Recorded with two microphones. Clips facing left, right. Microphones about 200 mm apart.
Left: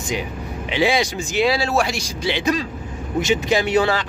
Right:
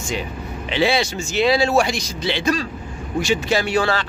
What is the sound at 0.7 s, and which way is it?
Speech, 15° left (ahead or behind).